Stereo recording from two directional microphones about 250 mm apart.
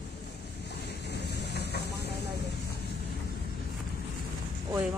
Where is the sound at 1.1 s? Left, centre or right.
Left.